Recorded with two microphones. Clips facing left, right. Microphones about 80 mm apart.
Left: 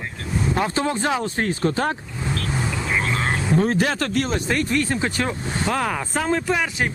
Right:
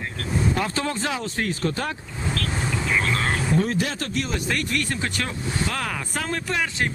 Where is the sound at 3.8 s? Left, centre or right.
Left.